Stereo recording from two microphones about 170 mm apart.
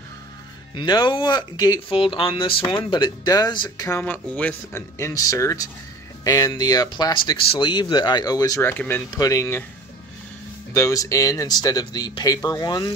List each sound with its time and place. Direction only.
0.7 s speech: 25° left (ahead or behind)
4.0 s speech: 5° left (ahead or behind)
10.7 s speech: 20° left (ahead or behind)